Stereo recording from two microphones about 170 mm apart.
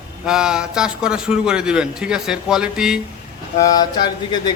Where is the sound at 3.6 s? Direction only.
25° left (ahead or behind).